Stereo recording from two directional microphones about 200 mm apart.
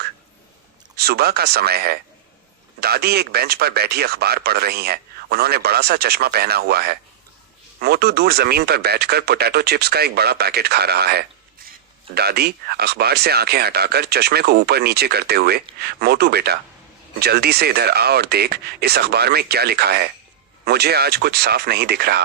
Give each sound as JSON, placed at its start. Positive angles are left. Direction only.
{"t": 0.9, "sound": "speech", "side_deg": -50}